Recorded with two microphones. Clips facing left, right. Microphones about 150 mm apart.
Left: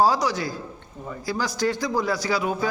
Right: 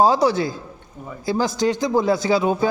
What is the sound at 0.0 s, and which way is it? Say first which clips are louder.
A man's voice: right 5 dB; 25° right (ahead or behind).